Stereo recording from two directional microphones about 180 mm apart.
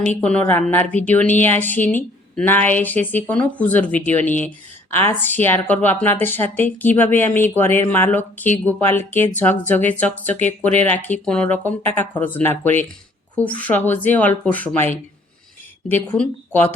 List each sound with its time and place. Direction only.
0.2 s a woman's voice: 10° left (ahead or behind)
16.0 s a woman's voice: 5° left (ahead or behind)